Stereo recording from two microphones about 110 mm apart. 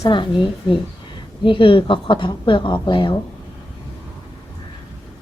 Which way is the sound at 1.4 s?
50° left (ahead or behind).